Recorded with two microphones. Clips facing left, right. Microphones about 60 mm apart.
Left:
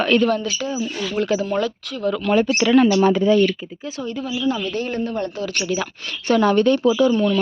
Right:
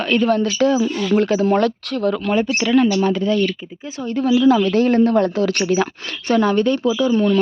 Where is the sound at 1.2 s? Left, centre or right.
Right.